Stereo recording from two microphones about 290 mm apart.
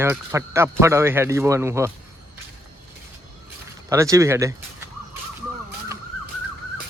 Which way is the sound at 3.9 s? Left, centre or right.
Centre.